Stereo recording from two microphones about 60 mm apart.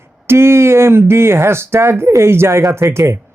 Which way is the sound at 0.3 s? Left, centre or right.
Right.